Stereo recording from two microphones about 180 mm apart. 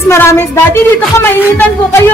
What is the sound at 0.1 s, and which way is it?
A woman's voice, 15° left (ahead or behind).